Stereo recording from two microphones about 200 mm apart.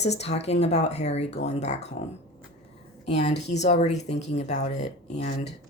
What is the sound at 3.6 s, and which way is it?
Speech, 35° left (ahead or behind).